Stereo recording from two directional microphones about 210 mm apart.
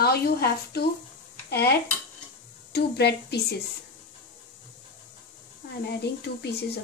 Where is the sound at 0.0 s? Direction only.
50° left (ahead or behind).